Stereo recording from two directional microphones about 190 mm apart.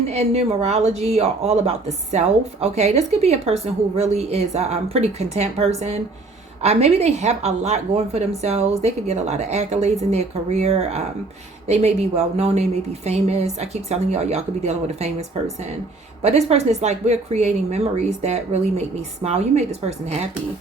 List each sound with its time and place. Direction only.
0.1 s a woman's voice: 35° right (ahead or behind)
16.2 s a woman's voice: 35° right (ahead or behind)